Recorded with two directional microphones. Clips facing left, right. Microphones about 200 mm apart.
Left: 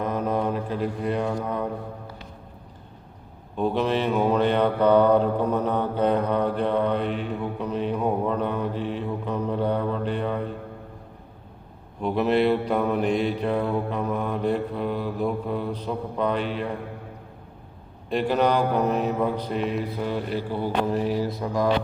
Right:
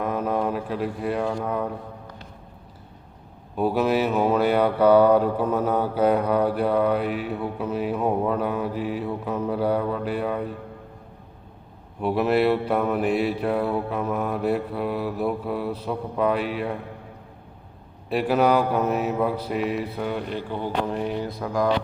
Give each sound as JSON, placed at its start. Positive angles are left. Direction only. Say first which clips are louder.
{"t": 0.0, "sound": "mantra", "louder": "even", "side_deg": 0}
{"t": 3.6, "sound": "mantra", "louder": "right 2 dB", "side_deg": -5}
{"t": 12.0, "sound": "mantra", "louder": "right 1 dB", "side_deg": -5}
{"t": 18.1, "sound": "mantra", "louder": "right 2 dB", "side_deg": -5}